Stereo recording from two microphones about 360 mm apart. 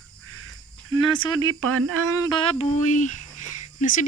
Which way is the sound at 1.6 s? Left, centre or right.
Right.